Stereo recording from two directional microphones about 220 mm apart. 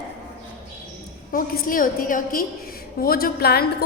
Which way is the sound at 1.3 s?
40° left (ahead or behind).